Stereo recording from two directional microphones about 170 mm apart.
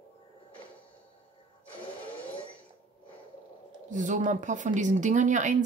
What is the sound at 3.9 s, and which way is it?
Speech, 45° right (ahead or behind).